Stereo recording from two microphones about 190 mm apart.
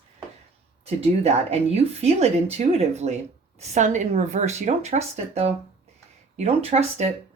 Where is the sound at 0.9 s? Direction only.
35° right (ahead or behind).